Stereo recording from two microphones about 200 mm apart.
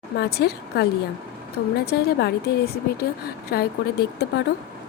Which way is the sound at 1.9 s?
50° left (ahead or behind).